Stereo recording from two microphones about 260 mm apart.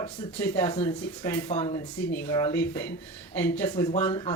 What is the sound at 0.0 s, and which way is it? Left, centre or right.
Speech, centre.